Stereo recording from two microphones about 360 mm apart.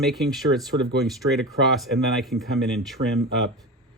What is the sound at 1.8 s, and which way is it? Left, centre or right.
Speech, centre.